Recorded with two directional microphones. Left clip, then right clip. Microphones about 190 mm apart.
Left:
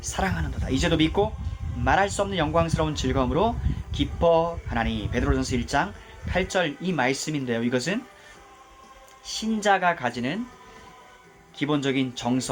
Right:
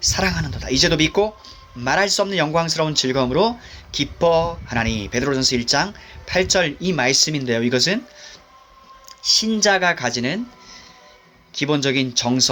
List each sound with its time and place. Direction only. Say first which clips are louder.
0.0 s speech: right 8 dB; 35° right (ahead or behind)
9.2 s speech: right 8 dB; 35° right (ahead or behind)
11.5 s speech: right 6 dB; 35° right (ahead or behind)